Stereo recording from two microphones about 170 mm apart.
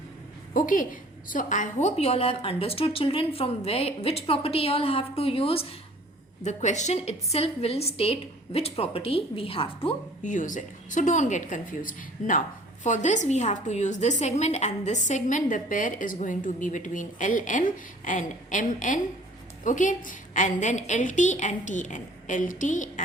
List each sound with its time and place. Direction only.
0.5 s a woman's voice: 50° left (ahead or behind); by 9.9 s 35° left (ahead or behind)
10.2 s a woman's voice: 50° left (ahead or behind)